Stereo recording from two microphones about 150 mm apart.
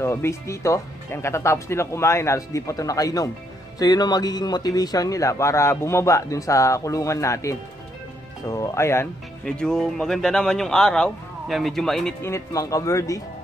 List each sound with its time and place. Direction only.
0.0 s speech: 15° left (ahead or behind)
9.4 s speech: 5° left (ahead or behind)
12.2 s speech: 20° left (ahead or behind)